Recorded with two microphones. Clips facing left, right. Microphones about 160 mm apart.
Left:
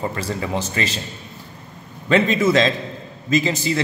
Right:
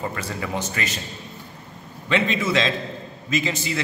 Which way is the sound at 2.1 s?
40° left (ahead or behind).